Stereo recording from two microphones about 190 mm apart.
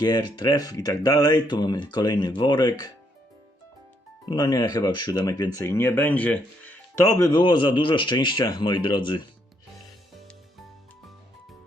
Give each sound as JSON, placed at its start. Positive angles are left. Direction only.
{"t": 0.0, "sound": "speech", "side_deg": 20}
{"t": 4.3, "sound": "speech", "side_deg": 20}
{"t": 7.2, "sound": "speech", "side_deg": 20}